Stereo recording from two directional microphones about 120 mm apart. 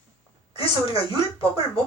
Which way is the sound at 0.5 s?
50° left (ahead or behind).